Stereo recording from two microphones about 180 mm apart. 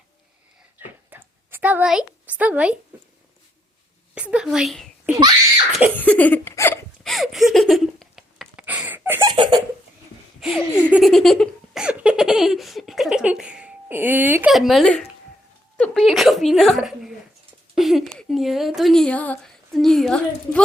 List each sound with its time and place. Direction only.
0.8 s a sound: 10° right (ahead or behind)
4.1 s a woman's voice: 5° right (ahead or behind)
6.0 s hiccup: 10° left (ahead or behind)
7.0 s a sound: centre (ahead or behind)
9.2 s laughter: 25° right (ahead or behind)
10.4 s laughter: 5° right (ahead or behind)
15.8 s a woman's voice: centre (ahead or behind)